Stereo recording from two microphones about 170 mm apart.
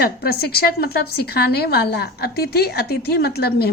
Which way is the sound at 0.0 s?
65° left (ahead or behind).